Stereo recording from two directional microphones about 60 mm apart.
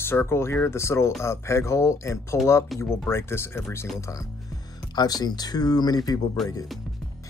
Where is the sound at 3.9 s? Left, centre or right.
Left.